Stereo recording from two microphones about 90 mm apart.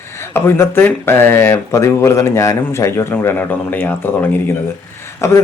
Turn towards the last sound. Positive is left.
turn(degrees=35)  # may be behind; listen again after turning